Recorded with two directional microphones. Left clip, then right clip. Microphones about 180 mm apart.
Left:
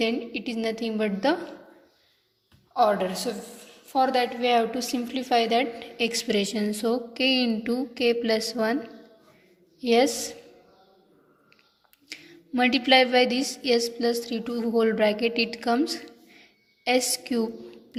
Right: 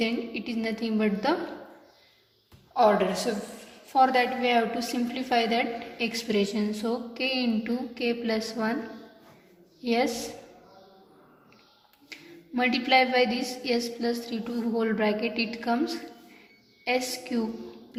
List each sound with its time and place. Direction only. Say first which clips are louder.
0.0 s a woman's voice: left 3 dB; 40° left (ahead or behind)
2.7 s a woman's voice: right 1 dB; 35° left (ahead or behind)
9.8 s a woman's voice: left 5 dB; 45° left (ahead or behind)
12.0 s a woman's voice: left 2 dB; 45° left (ahead or behind)